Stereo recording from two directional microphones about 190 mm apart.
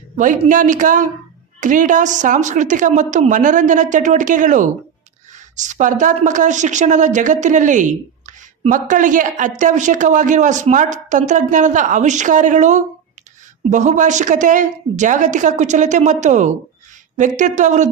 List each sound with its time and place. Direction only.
0.2 s a woman's voice: 45° right (ahead or behind)